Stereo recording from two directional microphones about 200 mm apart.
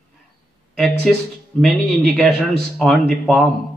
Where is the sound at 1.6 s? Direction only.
Centre (ahead or behind).